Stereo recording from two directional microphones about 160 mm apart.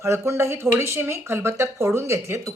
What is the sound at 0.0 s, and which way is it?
Speech, 20° right (ahead or behind).